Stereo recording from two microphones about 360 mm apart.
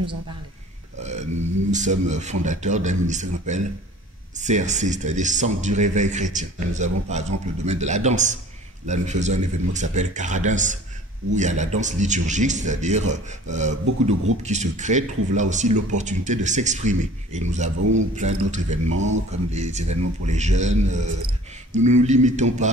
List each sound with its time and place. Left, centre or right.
1.0 s speech: centre